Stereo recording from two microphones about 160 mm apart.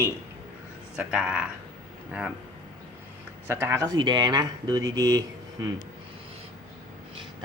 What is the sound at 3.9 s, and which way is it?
Speech, 30° right (ahead or behind).